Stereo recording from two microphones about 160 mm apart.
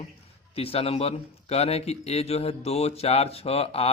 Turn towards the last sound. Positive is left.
turn(degrees=40)  # may be behind; listen again after turning